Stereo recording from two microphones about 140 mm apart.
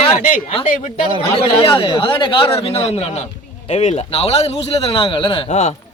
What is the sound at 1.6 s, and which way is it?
A man's voice, 40° left (ahead or behind).